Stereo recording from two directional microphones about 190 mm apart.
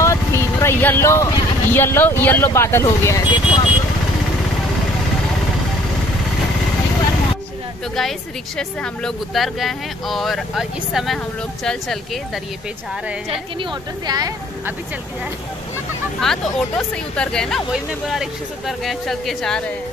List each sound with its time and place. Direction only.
0.0 s speech: 15° left (ahead or behind)
8.5 s speech: 5° left (ahead or behind)
13.3 s a woman's voice: 25° right (ahead or behind)
16.2 s speech: centre (ahead or behind)